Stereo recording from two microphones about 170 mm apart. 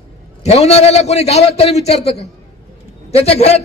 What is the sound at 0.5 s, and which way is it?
A man's voice, 40° left (ahead or behind).